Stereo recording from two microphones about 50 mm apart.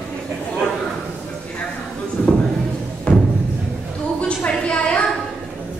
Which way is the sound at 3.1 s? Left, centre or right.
Left.